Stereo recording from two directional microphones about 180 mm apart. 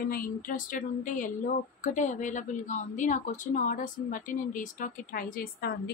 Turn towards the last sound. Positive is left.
turn(degrees=50)  # may be behind; listen again after turning